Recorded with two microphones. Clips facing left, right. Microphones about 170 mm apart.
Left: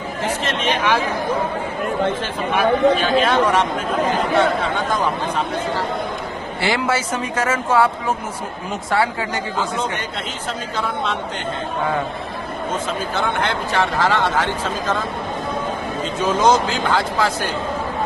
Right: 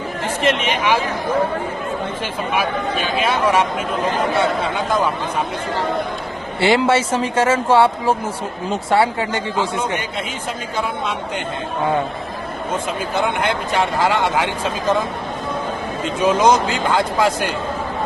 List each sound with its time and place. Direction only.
0.4 s a man's voice: 15° right (ahead or behind)
2.6 s a man's voice: 10° right (ahead or behind)
6.6 s speech: 25° right (ahead or behind)
13.1 s a man's voice: 15° right (ahead or behind)
16.2 s a man's voice: 15° right (ahead or behind)